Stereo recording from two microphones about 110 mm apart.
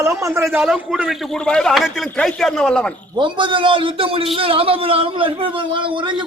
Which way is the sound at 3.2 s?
45° right (ahead or behind).